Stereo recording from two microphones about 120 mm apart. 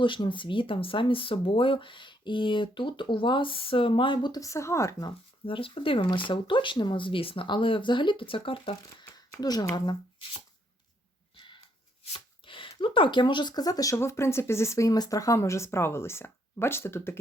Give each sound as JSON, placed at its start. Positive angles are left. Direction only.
{"t": 0.0, "sound": "speech", "side_deg": 45}
{"t": 5.5, "sound": "speech", "side_deg": 50}
{"t": 9.1, "sound": "speech", "side_deg": 35}
{"t": 11.3, "sound": "a sound", "side_deg": 40}
{"t": 12.1, "sound": "speech", "side_deg": 45}